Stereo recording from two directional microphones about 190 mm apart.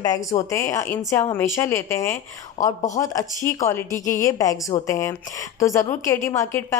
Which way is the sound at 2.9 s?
15° left (ahead or behind).